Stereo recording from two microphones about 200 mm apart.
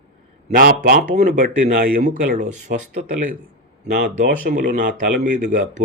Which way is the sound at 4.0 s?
45° right (ahead or behind).